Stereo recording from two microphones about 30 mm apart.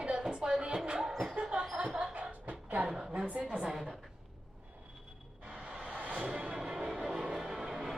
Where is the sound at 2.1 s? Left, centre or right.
Right.